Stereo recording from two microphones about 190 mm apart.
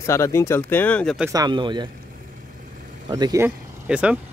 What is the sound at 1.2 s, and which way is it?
Speech, 20° right (ahead or behind).